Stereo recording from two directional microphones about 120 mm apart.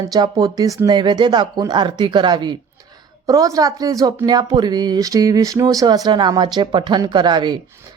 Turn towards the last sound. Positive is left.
turn(degrees=-40)  # may be behind; listen again after turning